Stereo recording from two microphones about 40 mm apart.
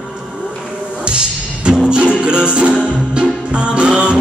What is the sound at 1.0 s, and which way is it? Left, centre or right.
Music, right.